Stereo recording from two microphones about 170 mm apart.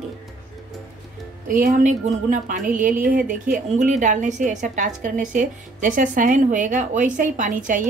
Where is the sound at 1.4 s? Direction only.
55° right (ahead or behind).